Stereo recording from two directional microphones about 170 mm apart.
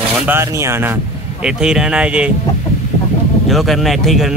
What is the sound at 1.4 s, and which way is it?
Speech, 5° right (ahead or behind).